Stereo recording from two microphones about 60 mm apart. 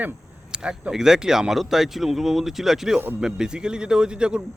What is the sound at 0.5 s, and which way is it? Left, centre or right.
Speech, centre.